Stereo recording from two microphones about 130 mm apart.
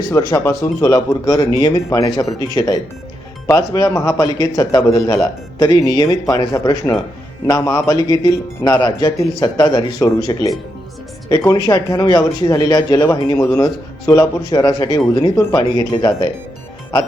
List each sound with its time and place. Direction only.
0.1 s a man's voice: 20° left (ahead or behind)